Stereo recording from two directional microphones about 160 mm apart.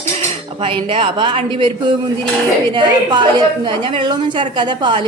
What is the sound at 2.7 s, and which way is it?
A woman's voice, 30° right (ahead or behind).